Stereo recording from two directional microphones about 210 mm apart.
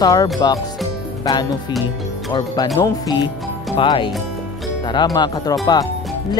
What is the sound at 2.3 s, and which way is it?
Speech, 20° left (ahead or behind).